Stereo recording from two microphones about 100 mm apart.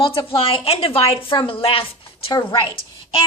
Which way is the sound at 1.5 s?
60° left (ahead or behind).